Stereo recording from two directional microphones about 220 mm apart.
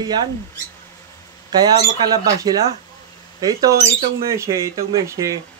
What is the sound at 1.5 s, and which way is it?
Speech, 15° right (ahead or behind).